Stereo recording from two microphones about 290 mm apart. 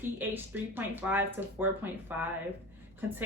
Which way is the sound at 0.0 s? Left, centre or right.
Centre.